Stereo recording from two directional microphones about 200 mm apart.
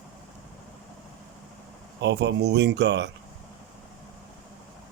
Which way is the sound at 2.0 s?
60° right (ahead or behind).